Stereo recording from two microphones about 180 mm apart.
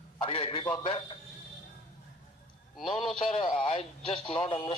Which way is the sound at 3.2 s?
25° left (ahead or behind).